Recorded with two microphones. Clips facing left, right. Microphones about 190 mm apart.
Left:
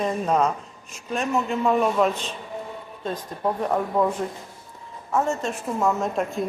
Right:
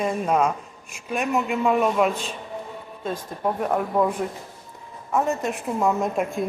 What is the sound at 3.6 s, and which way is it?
Speech, 5° right (ahead or behind).